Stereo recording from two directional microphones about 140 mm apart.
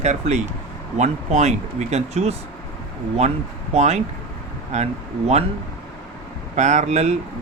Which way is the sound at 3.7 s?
55° right (ahead or behind).